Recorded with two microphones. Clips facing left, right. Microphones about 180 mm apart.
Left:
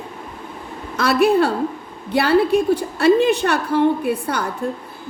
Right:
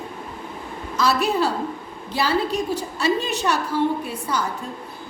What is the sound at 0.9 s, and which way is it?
A woman's voice, 60° left (ahead or behind).